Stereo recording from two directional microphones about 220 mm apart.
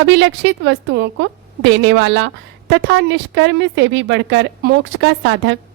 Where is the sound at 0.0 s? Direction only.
55° right (ahead or behind).